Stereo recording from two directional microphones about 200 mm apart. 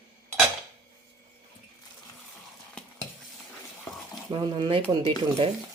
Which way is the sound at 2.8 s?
5° left (ahead or behind).